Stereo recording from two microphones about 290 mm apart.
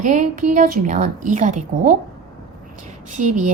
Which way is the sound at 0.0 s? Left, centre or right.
Right.